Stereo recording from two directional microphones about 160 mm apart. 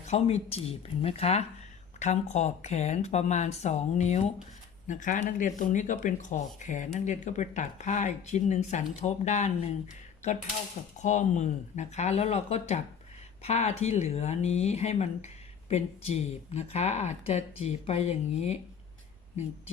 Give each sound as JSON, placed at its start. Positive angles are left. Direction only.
{"t": 0.0, "sound": "speech", "side_deg": 45}
{"t": 4.9, "sound": "speech", "side_deg": 55}
{"t": 10.9, "sound": "speech", "side_deg": 50}